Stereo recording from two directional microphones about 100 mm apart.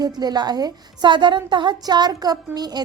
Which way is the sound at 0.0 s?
40° right (ahead or behind).